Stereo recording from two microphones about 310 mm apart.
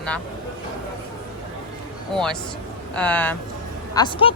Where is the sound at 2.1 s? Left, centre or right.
Centre.